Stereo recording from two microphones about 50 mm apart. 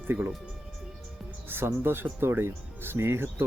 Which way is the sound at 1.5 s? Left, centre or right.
Right.